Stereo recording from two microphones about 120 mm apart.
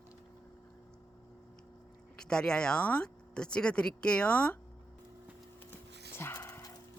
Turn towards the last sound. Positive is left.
turn(degrees=20)  # may be behind; listen again after turning